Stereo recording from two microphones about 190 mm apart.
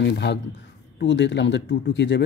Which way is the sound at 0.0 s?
65° left (ahead or behind).